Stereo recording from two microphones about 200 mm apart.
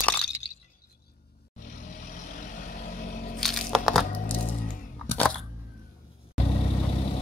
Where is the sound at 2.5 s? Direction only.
45° left (ahead or behind).